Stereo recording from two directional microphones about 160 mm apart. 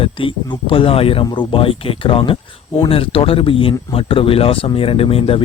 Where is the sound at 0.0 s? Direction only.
35° left (ahead or behind).